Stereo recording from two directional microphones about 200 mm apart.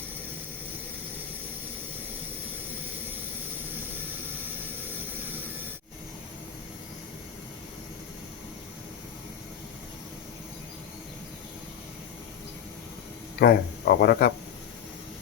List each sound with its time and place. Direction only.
13.4 s speech: 50° left (ahead or behind)